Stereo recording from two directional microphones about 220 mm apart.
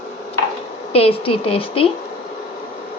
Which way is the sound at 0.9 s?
25° left (ahead or behind).